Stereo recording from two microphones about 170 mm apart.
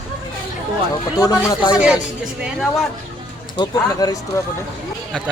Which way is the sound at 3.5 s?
25° left (ahead or behind).